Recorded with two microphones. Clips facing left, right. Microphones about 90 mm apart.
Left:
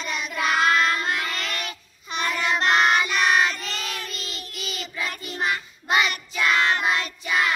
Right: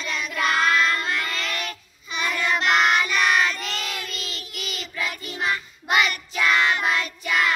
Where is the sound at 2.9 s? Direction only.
25° left (ahead or behind).